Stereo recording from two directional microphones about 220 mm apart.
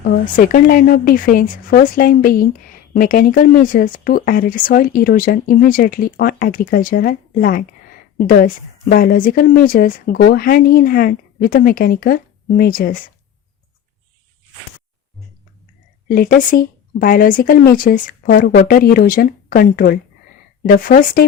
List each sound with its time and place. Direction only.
0.0 s speech: 40° left (ahead or behind)
16.0 s speech: 40° left (ahead or behind)